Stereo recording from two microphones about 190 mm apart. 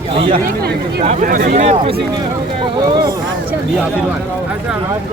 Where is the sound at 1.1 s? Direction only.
40° right (ahead or behind).